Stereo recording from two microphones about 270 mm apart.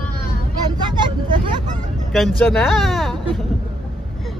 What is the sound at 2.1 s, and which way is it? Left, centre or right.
Speech, centre.